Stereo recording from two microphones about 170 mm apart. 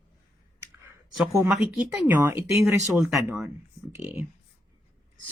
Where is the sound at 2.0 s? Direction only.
10° right (ahead or behind).